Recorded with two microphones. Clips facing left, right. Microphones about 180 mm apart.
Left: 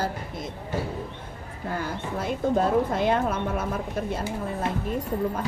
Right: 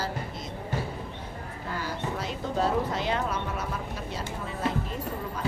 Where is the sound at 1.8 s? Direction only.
50° left (ahead or behind).